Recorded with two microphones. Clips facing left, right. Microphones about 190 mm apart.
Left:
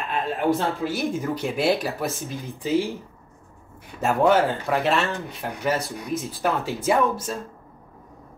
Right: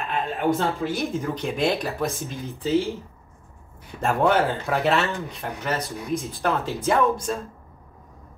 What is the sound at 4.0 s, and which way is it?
Speech, centre (ahead or behind).